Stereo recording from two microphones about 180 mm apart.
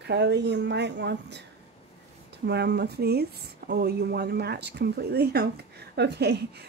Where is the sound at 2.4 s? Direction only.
70° right (ahead or behind).